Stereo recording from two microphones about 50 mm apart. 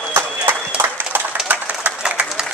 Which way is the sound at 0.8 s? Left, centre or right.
Right.